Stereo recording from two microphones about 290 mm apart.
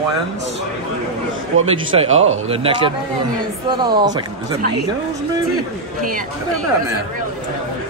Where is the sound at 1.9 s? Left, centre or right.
Right.